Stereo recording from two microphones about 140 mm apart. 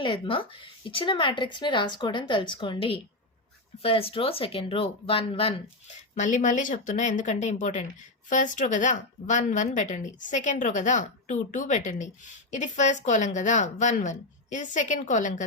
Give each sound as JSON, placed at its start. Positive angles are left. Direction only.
{"t": 0.0, "sound": "speech", "side_deg": 35}
{"t": 6.1, "sound": "speech", "side_deg": 60}